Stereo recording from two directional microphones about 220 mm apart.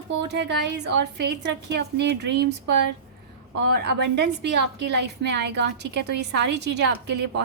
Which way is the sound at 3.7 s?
50° right (ahead or behind).